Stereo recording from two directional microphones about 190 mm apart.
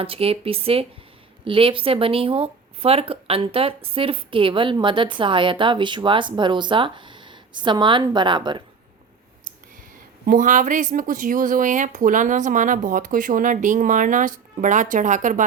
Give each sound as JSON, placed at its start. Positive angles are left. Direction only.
{"t": 0.0, "sound": "speech", "side_deg": -30}
{"t": 10.2, "sound": "speech", "side_deg": -45}